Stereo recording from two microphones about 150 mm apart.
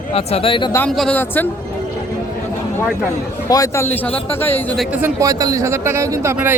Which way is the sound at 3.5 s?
20° left (ahead or behind).